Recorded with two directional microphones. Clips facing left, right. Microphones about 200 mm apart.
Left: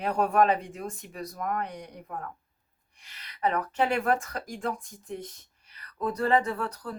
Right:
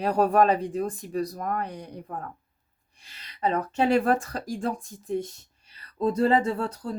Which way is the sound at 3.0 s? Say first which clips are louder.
Right 1 dB; 30° right (ahead or behind).